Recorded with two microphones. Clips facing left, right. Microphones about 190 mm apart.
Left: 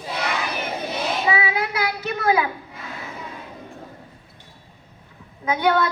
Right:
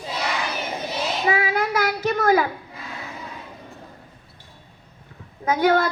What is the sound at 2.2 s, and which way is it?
Speech, 50° right (ahead or behind).